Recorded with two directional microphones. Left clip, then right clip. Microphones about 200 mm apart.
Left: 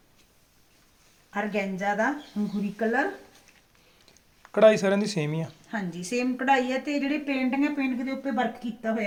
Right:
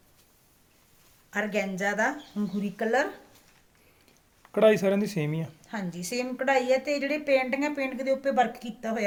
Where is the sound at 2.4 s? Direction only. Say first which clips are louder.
Left 1 dB; 65° right (ahead or behind).